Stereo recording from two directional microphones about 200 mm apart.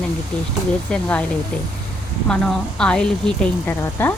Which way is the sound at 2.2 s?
5° left (ahead or behind).